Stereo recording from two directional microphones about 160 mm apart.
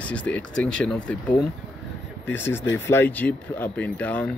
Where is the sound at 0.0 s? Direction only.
10° left (ahead or behind).